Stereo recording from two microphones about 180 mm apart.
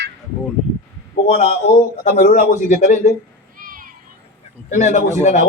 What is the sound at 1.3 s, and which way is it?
A man's voice, 40° left (ahead or behind).